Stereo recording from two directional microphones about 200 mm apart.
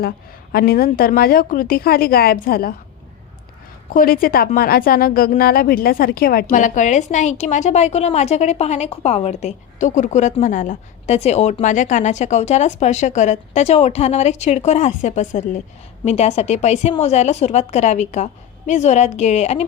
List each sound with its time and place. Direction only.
0.5 s a woman's voice: 50° left (ahead or behind)
3.9 s speech: 45° left (ahead or behind)